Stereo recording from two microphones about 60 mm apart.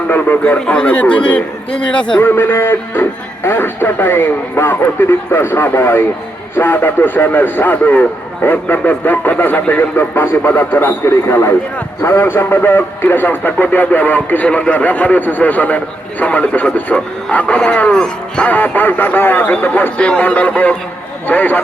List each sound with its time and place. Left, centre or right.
0.1 s speech: left
2.2 s speech: left
11.0 s speech: left; by 18.4 s centre
18.4 s speech: left